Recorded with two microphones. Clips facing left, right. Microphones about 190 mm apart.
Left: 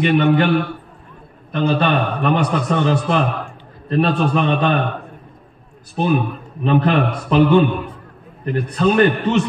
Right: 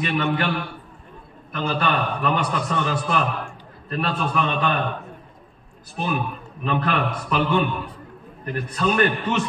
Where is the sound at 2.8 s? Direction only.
25° left (ahead or behind).